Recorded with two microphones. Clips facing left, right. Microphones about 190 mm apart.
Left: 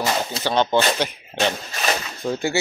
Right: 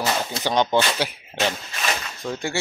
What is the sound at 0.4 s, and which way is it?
Speech, 15° right (ahead or behind).